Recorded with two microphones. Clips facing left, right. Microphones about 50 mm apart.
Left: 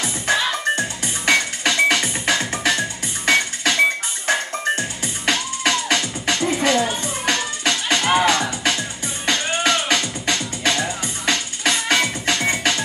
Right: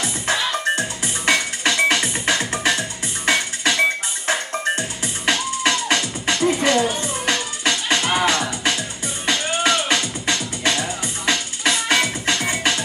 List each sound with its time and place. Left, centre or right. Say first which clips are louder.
0.0 s music: left 2 dB; centre